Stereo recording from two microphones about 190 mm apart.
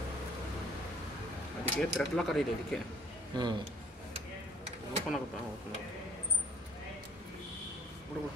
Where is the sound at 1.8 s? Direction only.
5° left (ahead or behind).